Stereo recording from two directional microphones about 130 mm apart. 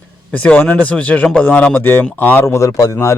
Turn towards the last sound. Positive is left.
turn(degrees=25)  # may be behind; listen again after turning